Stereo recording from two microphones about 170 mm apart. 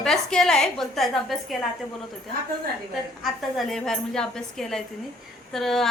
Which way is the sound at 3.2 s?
Centre (ahead or behind).